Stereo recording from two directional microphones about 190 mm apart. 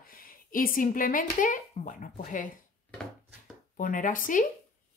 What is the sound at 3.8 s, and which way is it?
Speech, 45° left (ahead or behind).